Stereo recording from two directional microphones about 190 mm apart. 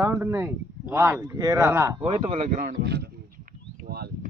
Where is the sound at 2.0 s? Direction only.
30° right (ahead or behind).